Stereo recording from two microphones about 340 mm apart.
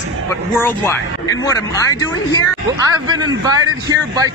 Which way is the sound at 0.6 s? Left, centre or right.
Centre.